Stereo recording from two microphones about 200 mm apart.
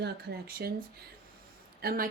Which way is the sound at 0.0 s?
50° right (ahead or behind).